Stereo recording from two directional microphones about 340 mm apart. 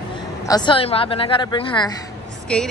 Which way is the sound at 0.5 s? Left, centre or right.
Centre.